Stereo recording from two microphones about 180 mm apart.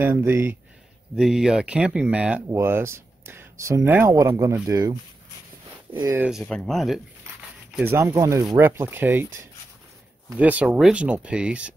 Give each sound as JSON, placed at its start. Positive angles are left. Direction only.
{"t": 0.0, "sound": "speech", "side_deg": -10}
{"t": 5.9, "sound": "speech", "side_deg": -15}
{"t": 6.4, "sound": "speech", "side_deg": 5}
{"t": 7.7, "sound": "speech", "side_deg": -10}